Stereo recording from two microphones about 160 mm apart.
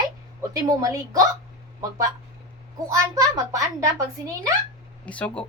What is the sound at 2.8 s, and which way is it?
A woman's voice, 20° right (ahead or behind).